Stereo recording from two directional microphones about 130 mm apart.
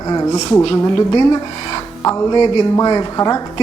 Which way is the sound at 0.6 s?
40° left (ahead or behind).